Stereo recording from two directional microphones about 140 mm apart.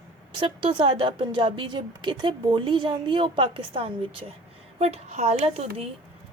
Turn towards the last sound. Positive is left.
turn(degrees=-45)  # may be behind; listen again after turning